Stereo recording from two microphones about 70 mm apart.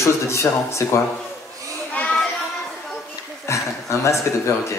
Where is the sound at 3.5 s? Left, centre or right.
Left.